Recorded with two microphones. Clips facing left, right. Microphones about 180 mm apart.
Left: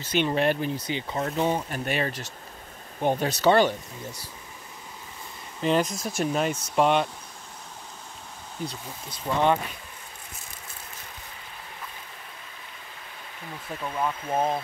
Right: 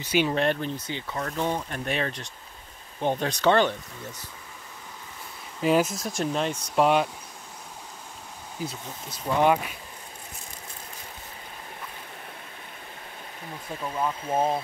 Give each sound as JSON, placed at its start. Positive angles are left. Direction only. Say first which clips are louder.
{"t": 0.0, "sound": "speech", "louder": "right 1 dB", "side_deg": -10}
{"t": 0.3, "sound": "speech", "louder": "left 1 dB", "side_deg": 5}
{"t": 1.0, "sound": "speech", "louder": "left 2 dB", "side_deg": 25}
{"t": 1.3, "sound": "speech", "louder": "left 2 dB", "side_deg": 10}
{"t": 5.6, "sound": "speech", "louder": "right 1 dB", "side_deg": -5}
{"t": 8.6, "sound": "speech", "louder": "even", "side_deg": -5}
{"t": 13.8, "sound": "speech", "louder": "even", "side_deg": -5}